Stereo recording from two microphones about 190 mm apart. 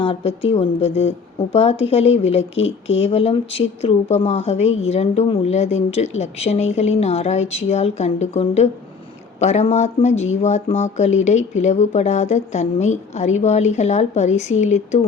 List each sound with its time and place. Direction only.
0.0 s a woman's voice: 25° left (ahead or behind)